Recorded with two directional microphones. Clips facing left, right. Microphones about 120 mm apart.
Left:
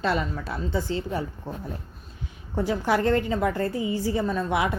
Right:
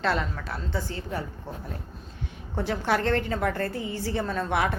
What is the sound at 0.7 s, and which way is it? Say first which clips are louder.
Speech: left 5 dB; 20° left (ahead or behind).